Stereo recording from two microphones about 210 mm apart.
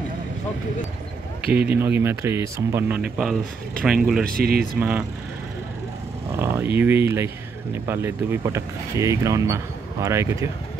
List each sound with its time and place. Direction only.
1.5 s speech: 5° right (ahead or behind)
4.2 s speech: 45° right (ahead or behind)
4.7 s speech: 5° right (ahead or behind)
6.3 s a sound: 10° right (ahead or behind)
6.8 s speech: 10° right (ahead or behind)